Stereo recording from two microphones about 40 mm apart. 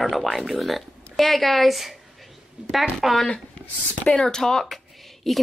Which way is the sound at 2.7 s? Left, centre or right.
Centre.